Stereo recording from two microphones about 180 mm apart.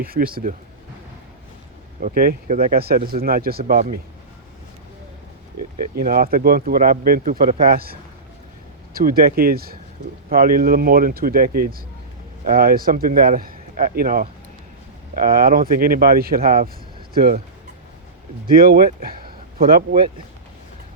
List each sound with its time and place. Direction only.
0.0 s speech: 55° right (ahead or behind)
2.0 s speech: 55° right (ahead or behind)
5.7 s speech: 50° right (ahead or behind)
18.4 s speech: 55° right (ahead or behind)